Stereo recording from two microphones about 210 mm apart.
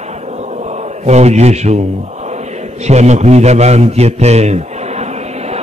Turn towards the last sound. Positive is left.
turn(degrees=-30)  # may be behind; listen again after turning